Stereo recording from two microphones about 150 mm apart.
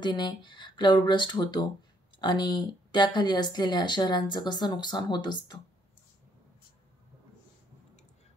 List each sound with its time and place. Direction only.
0.0 s speech: 30° left (ahead or behind)